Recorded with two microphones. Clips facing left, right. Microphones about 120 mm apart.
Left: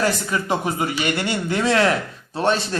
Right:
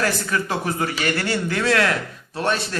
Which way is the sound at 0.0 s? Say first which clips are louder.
Left 1 dB; 20° left (ahead or behind).